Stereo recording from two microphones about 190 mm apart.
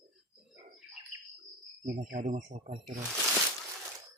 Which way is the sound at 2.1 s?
40° right (ahead or behind).